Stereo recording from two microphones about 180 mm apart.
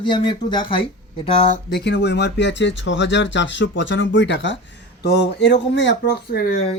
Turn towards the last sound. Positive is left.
turn(degrees=60)  # may be behind; listen again after turning